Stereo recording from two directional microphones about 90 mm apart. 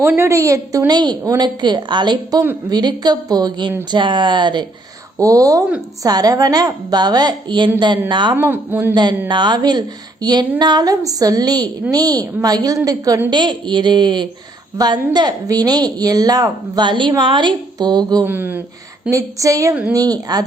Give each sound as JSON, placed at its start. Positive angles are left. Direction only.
{"t": 0.3, "sound": "a woman's voice", "side_deg": -35}
{"t": 3.9, "sound": "a woman's voice", "side_deg": -60}
{"t": 5.2, "sound": "a woman's voice", "side_deg": -40}
{"t": 8.4, "sound": "speech", "side_deg": -20}
{"t": 9.3, "sound": "a woman's voice", "side_deg": -55}
{"t": 13.3, "sound": "a woman's voice", "side_deg": -55}
{"t": 18.3, "sound": "speech", "side_deg": -20}
{"t": 19.1, "sound": "a woman's voice", "side_deg": -35}